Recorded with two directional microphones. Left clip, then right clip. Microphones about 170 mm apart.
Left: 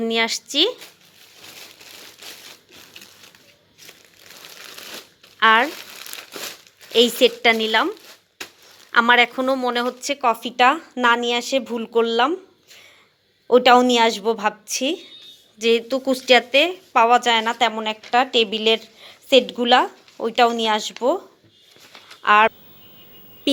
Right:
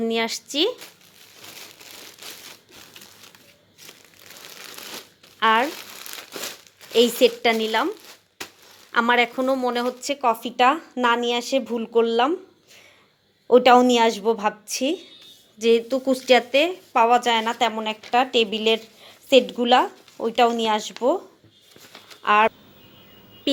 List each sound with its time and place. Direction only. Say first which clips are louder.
0.0 s speech: left 3 dB; centre (ahead or behind)
4.5 s shuffling cards: left 1 dB; 30° right (ahead or behind)
5.4 s speech: left 4 dB; centre (ahead or behind)
7.2 s speech: left 2 dB; centre (ahead or behind)
11.9 s a sound: left 1 dB; 5° right (ahead or behind)
13.5 s a woman's voice: left 1 dB; 10° right (ahead or behind)
22.2 s speech: left 3 dB; 5° right (ahead or behind)